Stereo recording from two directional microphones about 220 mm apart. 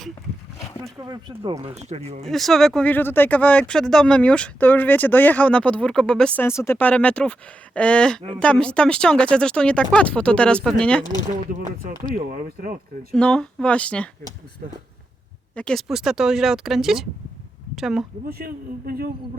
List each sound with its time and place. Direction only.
0.9 s speech: 20° right (ahead or behind)
2.2 s speech: centre (ahead or behind)
11.8 s speech: 40° right (ahead or behind)
13.1 s speech: 5° left (ahead or behind)
15.5 s speech: 5° left (ahead or behind)
18.3 s a man's voice: 40° right (ahead or behind)